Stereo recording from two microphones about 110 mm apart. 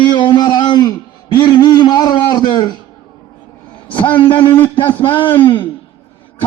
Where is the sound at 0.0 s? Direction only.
45° left (ahead or behind).